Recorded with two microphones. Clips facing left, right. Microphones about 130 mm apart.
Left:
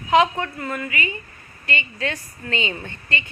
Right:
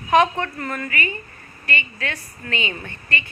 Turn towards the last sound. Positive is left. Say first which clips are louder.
# even
turn(degrees=25)  # may be behind; listen again after turning